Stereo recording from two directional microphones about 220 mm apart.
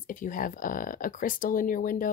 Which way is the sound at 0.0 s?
35° left (ahead or behind).